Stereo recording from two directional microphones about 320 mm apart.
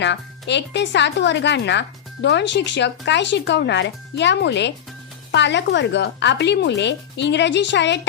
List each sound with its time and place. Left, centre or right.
0.0 s speech: left